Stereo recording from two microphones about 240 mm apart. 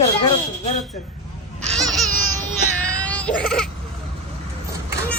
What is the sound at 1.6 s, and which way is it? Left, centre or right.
Babbling, centre.